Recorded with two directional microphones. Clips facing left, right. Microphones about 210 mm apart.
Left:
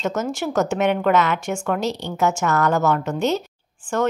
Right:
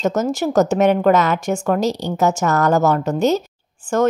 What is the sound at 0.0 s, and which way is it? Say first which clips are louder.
Speech: right 5 dB; 40° right (ahead or behind).